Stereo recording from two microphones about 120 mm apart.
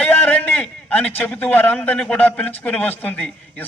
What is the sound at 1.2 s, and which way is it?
A man's voice, 15° left (ahead or behind).